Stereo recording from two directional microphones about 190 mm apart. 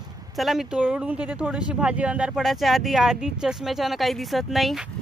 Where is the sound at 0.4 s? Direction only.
Centre (ahead or behind).